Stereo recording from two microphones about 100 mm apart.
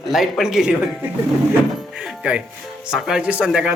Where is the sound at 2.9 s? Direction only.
10° right (ahead or behind).